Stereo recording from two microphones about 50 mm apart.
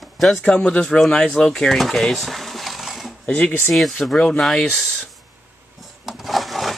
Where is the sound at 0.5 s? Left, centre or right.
Left.